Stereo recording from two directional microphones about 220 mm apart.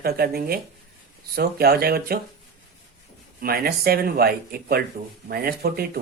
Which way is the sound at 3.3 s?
45° right (ahead or behind).